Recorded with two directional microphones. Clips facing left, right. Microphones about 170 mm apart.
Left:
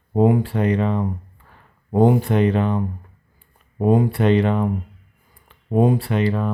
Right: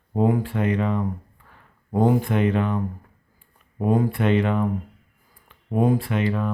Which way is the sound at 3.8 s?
25° left (ahead or behind).